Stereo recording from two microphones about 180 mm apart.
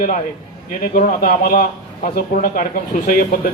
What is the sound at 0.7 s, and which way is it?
Speech, 55° left (ahead or behind).